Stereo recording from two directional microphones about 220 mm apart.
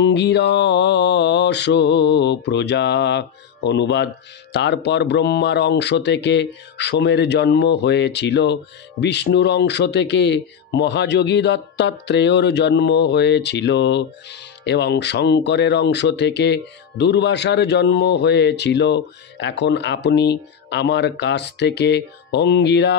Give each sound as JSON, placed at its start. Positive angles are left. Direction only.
{"t": 0.0, "sound": "speech", "side_deg": 50}